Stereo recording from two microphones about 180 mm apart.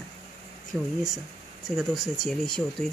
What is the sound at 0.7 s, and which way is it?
Speech, centre (ahead or behind).